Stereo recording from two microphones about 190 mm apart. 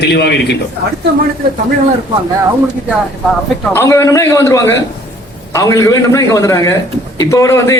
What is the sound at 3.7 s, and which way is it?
A man's voice, 15° left (ahead or behind).